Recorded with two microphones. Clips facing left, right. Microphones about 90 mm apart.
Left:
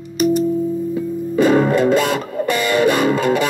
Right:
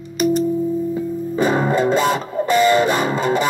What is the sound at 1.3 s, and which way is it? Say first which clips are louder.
Music: left 4 dB; 20° right (ahead or behind).